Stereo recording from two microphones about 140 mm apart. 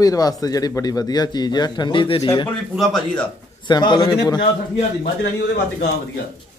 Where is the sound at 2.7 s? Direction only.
Centre (ahead or behind).